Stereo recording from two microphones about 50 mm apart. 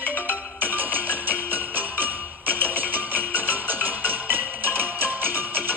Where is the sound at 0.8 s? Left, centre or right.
Left.